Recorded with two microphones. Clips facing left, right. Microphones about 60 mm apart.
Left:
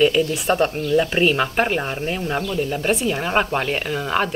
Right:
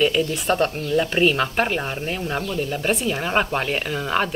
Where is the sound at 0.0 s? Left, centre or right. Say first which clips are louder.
Left 3 dB; centre.